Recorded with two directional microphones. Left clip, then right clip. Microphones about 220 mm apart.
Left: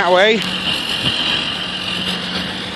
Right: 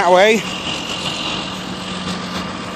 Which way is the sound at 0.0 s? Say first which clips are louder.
Right 1 dB; 10° right (ahead or behind).